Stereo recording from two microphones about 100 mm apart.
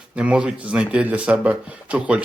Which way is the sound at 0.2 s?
10° right (ahead or behind).